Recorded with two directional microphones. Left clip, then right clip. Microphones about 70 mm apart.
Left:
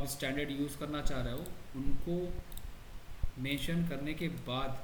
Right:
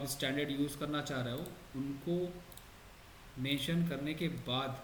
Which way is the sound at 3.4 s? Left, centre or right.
Centre.